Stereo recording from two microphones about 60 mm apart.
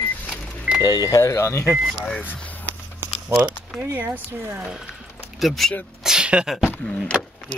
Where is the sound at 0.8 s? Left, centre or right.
Left.